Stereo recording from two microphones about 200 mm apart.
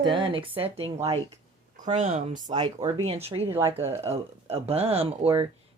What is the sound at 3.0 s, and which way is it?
Speech, 30° right (ahead or behind).